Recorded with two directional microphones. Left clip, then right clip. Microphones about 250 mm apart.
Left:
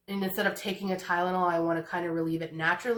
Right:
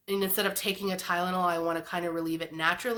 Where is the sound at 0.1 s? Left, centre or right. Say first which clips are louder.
Right 1 dB; right.